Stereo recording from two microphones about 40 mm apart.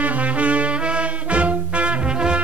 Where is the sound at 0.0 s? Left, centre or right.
Right.